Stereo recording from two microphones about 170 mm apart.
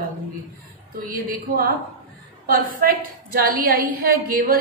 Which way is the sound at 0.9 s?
60° right (ahead or behind).